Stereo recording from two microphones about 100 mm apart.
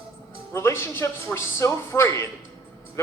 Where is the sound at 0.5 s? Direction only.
25° left (ahead or behind).